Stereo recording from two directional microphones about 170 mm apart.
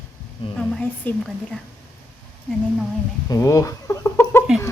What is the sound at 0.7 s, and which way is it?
Speech, 5° left (ahead or behind).